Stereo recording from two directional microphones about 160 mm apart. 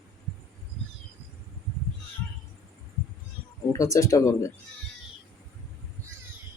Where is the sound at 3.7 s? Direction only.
20° left (ahead or behind).